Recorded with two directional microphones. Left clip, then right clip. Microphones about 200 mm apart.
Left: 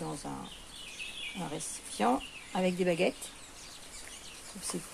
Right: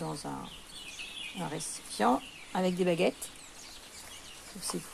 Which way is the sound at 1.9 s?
20° right (ahead or behind).